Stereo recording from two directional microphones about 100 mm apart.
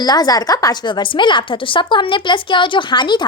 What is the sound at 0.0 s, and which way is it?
A woman's voice, 40° left (ahead or behind).